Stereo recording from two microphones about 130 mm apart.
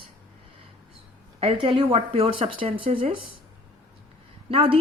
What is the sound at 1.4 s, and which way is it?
Speech, 45° right (ahead or behind).